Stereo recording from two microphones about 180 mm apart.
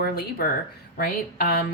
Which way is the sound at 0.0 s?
60° left (ahead or behind).